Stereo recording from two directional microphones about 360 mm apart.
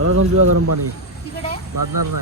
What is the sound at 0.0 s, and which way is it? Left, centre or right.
Speech, right.